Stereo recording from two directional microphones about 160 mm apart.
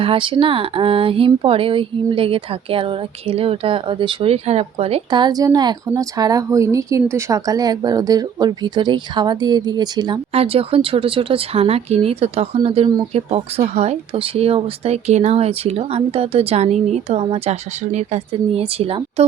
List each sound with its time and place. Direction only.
0.0 s speech: 35° right (ahead or behind)
10.3 s speech: 35° right (ahead or behind)